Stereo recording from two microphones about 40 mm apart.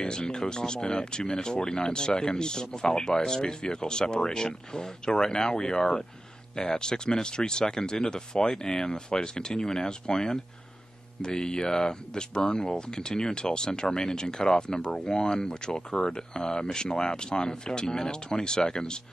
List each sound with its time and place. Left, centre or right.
0.0 s speech: centre